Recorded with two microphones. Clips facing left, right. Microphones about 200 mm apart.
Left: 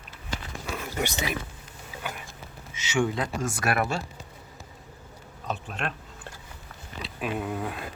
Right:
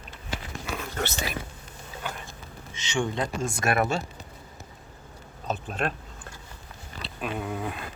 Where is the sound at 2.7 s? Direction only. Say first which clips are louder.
Left 2 dB; 5° left (ahead or behind).